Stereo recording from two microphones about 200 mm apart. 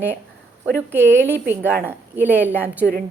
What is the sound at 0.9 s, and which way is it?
A woman's voice, 10° right (ahead or behind).